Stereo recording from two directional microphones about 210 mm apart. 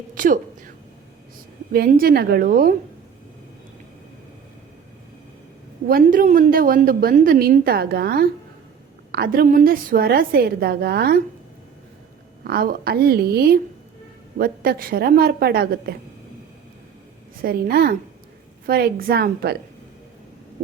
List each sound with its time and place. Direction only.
0.1 s a woman's voice: 40° right (ahead or behind)
1.7 s a woman's voice: 45° right (ahead or behind)
5.9 s a woman's voice: 40° right (ahead or behind)
12.5 s a woman's voice: 45° right (ahead or behind)
17.4 s a woman's voice: 45° right (ahead or behind)